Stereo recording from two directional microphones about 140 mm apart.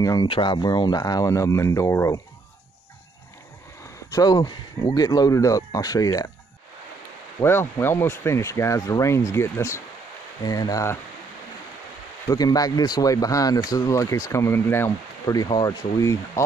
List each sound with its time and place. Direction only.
0.0 s speech: 30° left (ahead or behind)
4.1 s speech: 30° left (ahead or behind)
7.3 s speech: 15° left (ahead or behind)
12.3 s speech: 25° left (ahead or behind)